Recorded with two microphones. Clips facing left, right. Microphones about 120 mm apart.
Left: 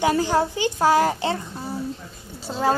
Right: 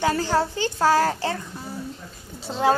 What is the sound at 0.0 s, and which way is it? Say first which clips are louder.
A woman's voice: left 2 dB; 15° left (ahead or behind).